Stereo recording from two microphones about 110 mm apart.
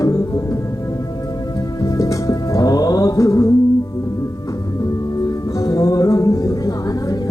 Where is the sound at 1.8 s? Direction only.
30° left (ahead or behind).